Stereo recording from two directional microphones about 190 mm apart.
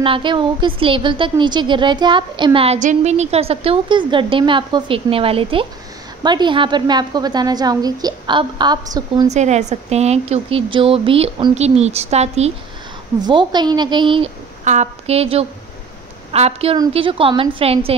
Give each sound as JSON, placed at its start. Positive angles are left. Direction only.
{"t": 0.0, "sound": "speech", "side_deg": -25}
{"t": 9.3, "sound": "a woman's voice", "side_deg": -35}
{"t": 13.2, "sound": "speech", "side_deg": -25}
{"t": 14.6, "sound": "a woman's voice", "side_deg": -40}